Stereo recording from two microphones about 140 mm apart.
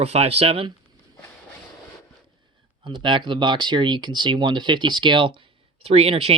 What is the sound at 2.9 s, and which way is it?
Speech, 35° right (ahead or behind).